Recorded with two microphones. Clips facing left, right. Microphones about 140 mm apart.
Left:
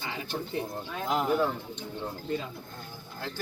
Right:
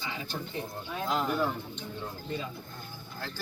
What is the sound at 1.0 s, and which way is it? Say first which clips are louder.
Speech: left 2 dB; 20° left (ahead or behind).